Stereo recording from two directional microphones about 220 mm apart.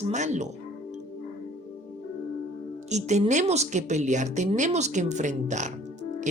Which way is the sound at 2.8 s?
30° right (ahead or behind).